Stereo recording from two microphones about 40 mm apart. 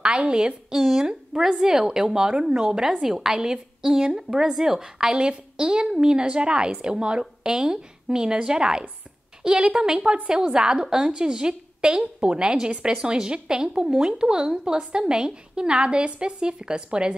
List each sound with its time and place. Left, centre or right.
0.0 s a woman's voice: right